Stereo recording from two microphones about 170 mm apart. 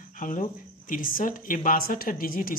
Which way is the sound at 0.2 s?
50° left (ahead or behind).